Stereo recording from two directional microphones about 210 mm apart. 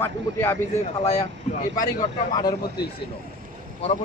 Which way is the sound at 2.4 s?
20° left (ahead or behind).